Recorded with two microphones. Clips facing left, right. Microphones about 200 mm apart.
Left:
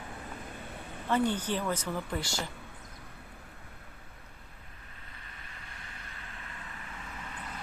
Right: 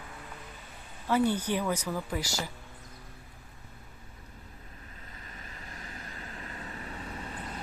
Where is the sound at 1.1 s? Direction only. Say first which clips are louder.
Right 2 dB; 10° right (ahead or behind).